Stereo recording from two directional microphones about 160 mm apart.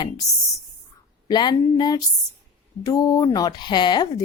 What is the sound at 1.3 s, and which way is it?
Speech, 25° left (ahead or behind).